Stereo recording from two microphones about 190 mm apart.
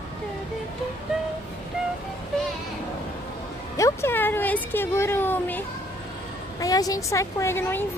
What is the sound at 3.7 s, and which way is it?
A woman's voice, 15° left (ahead or behind).